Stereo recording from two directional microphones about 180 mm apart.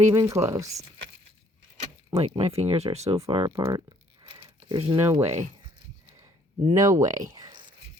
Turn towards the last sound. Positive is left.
turn(degrees=-25)  # may be behind; listen again after turning